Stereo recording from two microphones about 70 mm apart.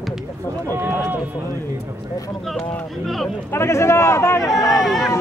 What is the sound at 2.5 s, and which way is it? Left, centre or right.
Speech, centre.